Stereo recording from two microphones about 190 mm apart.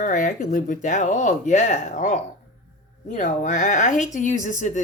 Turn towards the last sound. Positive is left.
turn(degrees=40)  # may be behind; listen again after turning